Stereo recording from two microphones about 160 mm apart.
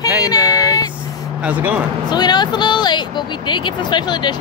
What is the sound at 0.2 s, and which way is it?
Female singing, 25° left (ahead or behind).